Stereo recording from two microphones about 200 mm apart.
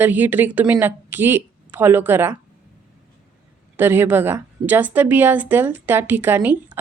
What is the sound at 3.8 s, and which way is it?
A woman's voice, 10° right (ahead or behind).